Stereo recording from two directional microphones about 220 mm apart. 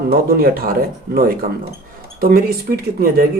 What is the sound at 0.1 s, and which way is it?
Speech, 40° right (ahead or behind).